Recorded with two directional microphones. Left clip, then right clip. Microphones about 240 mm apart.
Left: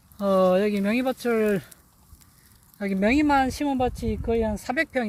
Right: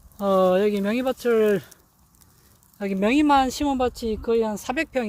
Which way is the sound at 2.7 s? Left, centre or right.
Centre.